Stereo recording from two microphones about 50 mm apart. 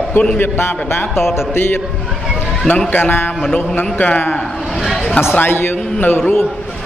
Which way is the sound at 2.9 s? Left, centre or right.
Left.